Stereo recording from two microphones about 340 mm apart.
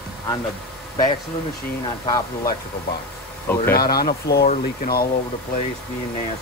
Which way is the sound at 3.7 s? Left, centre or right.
Left.